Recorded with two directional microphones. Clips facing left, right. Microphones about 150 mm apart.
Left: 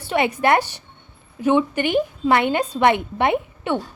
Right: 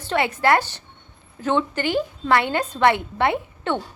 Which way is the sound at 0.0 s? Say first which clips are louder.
Left 1 dB; 15° left (ahead or behind).